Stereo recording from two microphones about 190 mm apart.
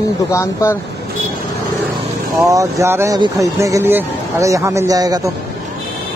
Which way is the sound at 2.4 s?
15° right (ahead or behind).